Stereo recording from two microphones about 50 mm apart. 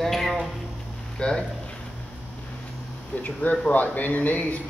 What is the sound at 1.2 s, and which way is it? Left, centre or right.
Speech, centre.